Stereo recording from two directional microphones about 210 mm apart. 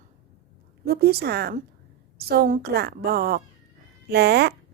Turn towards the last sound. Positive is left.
turn(degrees=-50)  # may be behind; listen again after turning